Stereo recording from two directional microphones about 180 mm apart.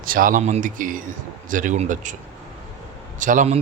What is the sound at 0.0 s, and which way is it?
A man's voice, 50° right (ahead or behind).